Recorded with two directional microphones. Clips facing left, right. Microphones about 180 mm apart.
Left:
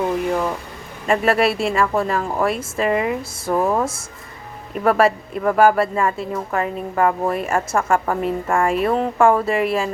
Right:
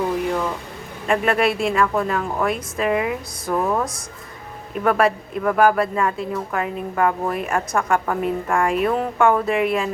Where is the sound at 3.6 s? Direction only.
25° left (ahead or behind).